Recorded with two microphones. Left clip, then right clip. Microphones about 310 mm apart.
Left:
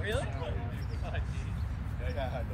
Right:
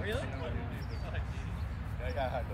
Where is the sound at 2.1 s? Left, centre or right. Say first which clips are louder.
Right 2 dB; centre.